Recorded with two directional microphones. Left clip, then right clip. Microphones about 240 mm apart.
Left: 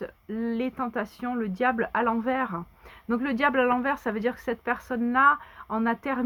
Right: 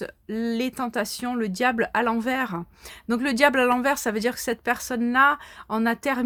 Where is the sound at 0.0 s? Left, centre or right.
Right.